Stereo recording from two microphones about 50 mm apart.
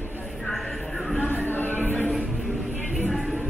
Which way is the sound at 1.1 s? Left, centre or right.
Left.